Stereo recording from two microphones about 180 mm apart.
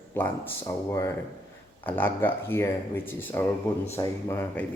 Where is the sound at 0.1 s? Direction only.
10° left (ahead or behind).